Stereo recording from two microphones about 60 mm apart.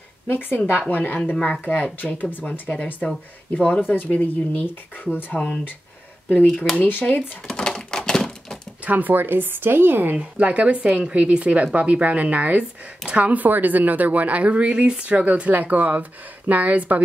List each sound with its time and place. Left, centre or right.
0.3 s speech: left
1.3 s speech: centre
1.6 s speech: left
3.8 s speech: left
6.8 s speech: left
7.2 s a sound: centre
8.8 s speech: right
10.1 s speech: right